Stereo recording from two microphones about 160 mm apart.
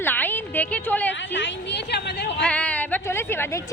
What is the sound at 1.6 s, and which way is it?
Speech, 90° left.